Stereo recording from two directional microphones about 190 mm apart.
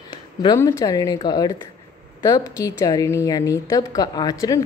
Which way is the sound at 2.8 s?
15° left (ahead or behind).